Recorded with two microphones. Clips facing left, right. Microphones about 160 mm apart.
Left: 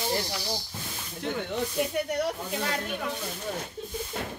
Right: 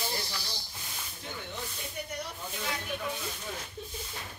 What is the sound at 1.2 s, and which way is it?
Speech, 70° left (ahead or behind).